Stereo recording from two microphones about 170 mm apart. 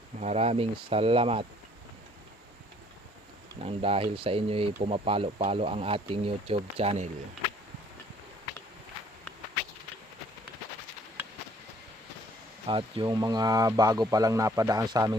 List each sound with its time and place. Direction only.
0.2 s speech: 40° right (ahead or behind)
3.6 s speech: 35° right (ahead or behind)
12.6 s speech: 30° right (ahead or behind)